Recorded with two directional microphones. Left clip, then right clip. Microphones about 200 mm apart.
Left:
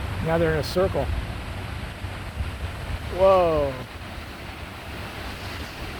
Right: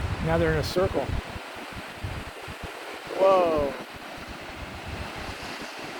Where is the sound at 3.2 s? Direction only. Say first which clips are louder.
Left 3 dB; 55° left (ahead or behind).